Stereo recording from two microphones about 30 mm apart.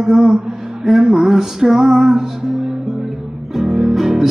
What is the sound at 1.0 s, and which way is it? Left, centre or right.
Music, centre.